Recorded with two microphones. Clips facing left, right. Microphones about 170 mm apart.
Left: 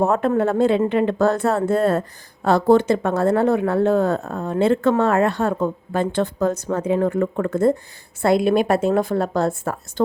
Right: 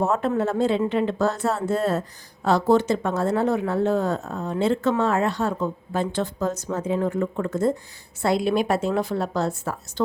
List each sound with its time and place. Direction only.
0.0 s a woman's voice: 55° left (ahead or behind)